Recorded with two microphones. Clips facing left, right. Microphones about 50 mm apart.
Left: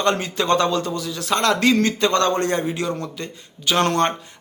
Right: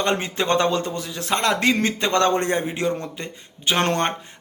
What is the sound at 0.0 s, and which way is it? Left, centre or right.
A man's voice, right.